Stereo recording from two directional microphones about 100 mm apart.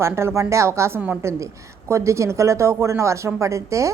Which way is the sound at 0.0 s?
25° right (ahead or behind).